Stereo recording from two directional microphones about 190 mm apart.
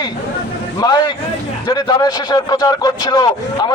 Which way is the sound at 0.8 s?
20° left (ahead or behind).